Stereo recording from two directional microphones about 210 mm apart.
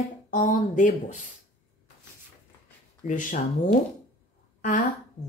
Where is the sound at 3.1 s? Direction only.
40° left (ahead or behind).